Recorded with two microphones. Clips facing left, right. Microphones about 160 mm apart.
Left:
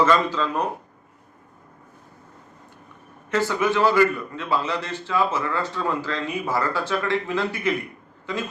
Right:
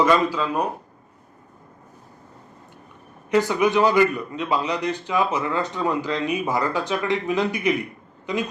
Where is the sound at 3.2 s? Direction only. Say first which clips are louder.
Right 3 dB; 15° right (ahead or behind).